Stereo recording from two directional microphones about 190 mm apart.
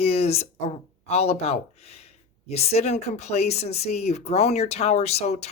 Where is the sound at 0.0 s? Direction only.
35° left (ahead or behind).